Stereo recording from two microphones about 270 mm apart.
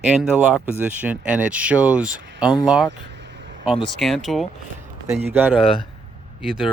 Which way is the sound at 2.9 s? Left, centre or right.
Right.